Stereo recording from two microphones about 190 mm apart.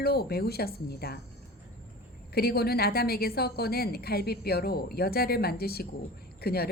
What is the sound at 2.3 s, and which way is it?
A woman's voice, 55° left (ahead or behind).